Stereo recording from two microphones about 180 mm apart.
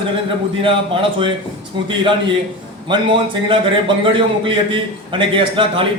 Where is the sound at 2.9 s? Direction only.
30° right (ahead or behind).